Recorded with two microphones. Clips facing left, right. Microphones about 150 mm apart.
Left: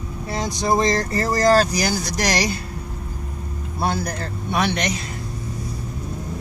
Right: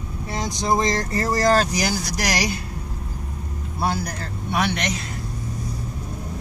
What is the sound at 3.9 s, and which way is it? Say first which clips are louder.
Speech: left 2 dB; 5° right (ahead or behind).